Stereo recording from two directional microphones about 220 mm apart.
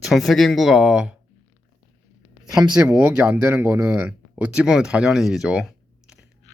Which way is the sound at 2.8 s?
5° right (ahead or behind).